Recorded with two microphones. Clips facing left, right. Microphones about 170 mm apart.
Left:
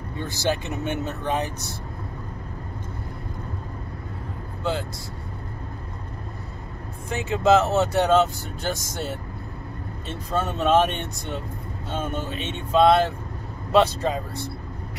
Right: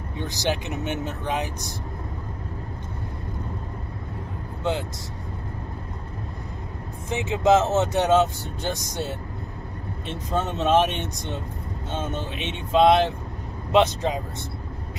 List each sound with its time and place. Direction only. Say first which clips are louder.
0.2 s speech: left 1 dB; 15° right (ahead or behind)
7.1 s speech: even; 20° right (ahead or behind)